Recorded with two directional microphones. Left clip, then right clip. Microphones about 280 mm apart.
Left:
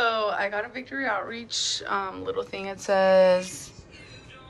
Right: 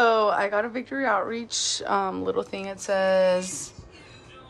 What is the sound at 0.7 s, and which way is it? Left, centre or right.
Speech, right.